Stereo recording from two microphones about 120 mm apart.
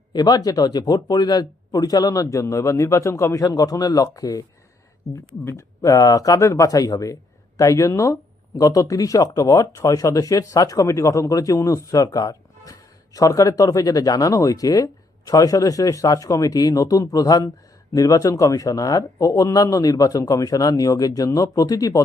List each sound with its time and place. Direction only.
0.1 s speech: 35° left (ahead or behind)